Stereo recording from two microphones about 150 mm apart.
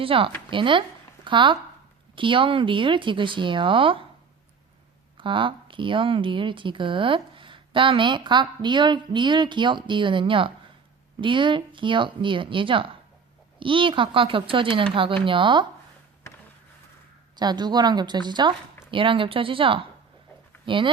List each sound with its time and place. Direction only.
0.0 s speech: 35° right (ahead or behind)
5.1 s speech: 35° right (ahead or behind)
17.3 s a woman's voice: 30° right (ahead or behind)